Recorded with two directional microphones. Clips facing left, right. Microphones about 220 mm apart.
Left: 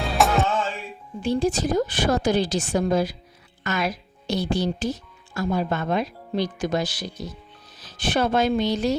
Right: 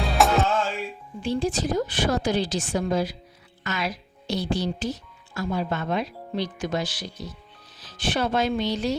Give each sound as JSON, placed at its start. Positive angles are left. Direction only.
{"t": 0.0, "sound": "music", "side_deg": 0}
{"t": 1.2, "sound": "a woman's voice", "side_deg": 45}